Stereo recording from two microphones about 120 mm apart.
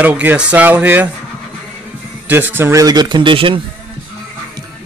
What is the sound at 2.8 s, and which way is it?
Speech, 40° right (ahead or behind).